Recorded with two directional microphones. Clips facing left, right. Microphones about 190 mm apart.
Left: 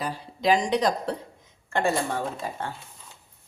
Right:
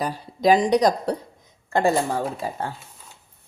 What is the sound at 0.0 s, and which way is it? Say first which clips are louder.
A woman's voice: right 5 dB; 40° right (ahead or behind).